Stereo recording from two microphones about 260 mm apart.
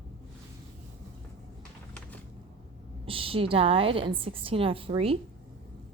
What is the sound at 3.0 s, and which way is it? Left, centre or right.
Speech, right.